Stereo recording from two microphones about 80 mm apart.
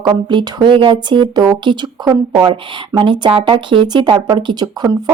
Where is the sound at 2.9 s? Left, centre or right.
Right.